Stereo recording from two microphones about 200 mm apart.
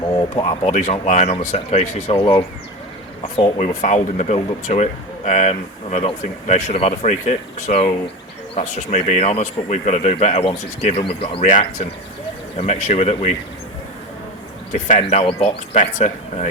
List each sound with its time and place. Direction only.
0.3 s speech: 30° left (ahead or behind)
14.7 s speech: 35° left (ahead or behind)